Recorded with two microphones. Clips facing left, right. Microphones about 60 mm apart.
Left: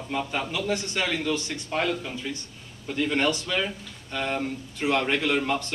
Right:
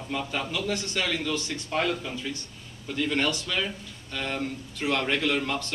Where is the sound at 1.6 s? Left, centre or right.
Centre.